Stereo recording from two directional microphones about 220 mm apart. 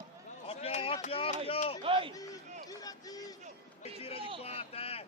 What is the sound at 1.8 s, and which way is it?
Speech, 25° right (ahead or behind).